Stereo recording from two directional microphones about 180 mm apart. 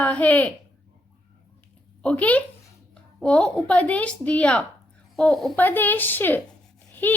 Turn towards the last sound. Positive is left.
turn(degrees=10)  # may be behind; listen again after turning